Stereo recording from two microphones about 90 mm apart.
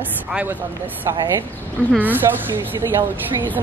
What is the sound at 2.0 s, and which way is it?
Speech, 20° right (ahead or behind).